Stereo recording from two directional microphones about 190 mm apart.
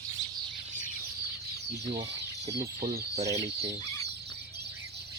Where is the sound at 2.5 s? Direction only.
50° right (ahead or behind).